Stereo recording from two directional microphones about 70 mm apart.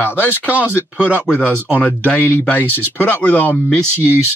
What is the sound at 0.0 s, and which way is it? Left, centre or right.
Speech, left.